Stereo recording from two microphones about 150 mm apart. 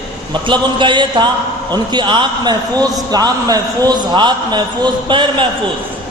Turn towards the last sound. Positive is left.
turn(degrees=-30)  # may be behind; listen again after turning